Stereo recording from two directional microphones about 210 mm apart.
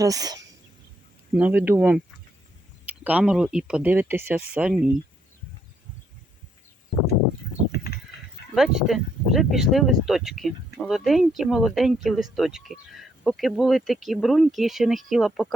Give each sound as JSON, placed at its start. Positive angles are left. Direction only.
{"t": 0.0, "sound": "speech", "side_deg": -15}
{"t": 3.0, "sound": "speech", "side_deg": -5}
{"t": 7.7, "sound": "a sound", "side_deg": 50}
{"t": 8.5, "sound": "speech", "side_deg": 0}